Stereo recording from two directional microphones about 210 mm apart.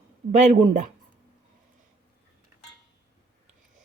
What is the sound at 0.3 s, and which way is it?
Speech, 35° right (ahead or behind).